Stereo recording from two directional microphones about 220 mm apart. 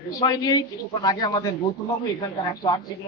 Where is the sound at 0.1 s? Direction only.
15° left (ahead or behind).